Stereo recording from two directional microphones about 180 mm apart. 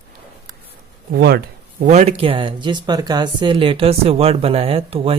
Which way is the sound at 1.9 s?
35° right (ahead or behind).